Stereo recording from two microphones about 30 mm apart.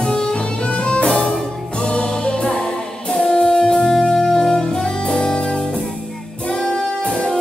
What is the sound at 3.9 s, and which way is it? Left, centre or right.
Music, centre.